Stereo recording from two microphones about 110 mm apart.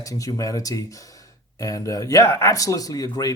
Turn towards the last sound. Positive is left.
turn(degrees=35)  # may be behind; listen again after turning